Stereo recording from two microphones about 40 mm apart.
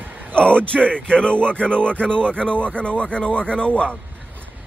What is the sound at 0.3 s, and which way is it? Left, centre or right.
A man's voice, left.